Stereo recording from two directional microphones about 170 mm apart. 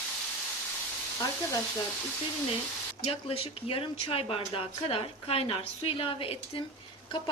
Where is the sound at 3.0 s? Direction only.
35° left (ahead or behind).